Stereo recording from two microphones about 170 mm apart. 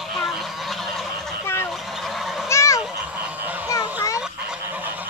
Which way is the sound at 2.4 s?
15° left (ahead or behind).